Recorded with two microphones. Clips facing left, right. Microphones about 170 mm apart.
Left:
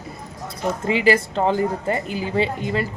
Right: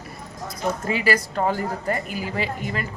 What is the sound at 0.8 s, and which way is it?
Speech, 25° left (ahead or behind).